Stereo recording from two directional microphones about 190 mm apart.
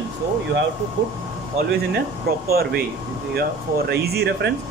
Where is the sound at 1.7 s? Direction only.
55° right (ahead or behind).